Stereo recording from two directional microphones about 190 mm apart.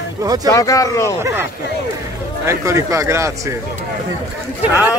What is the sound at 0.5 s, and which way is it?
Speech, 20° left (ahead or behind).